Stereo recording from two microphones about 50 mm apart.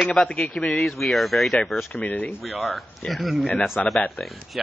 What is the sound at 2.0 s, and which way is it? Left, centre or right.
Speech, left.